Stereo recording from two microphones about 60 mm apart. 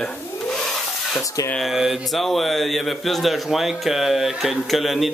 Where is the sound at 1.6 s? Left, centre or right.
Centre.